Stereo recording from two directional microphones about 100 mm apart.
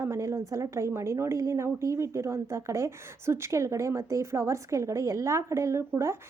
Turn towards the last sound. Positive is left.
turn(degrees=-30)  # may be behind; listen again after turning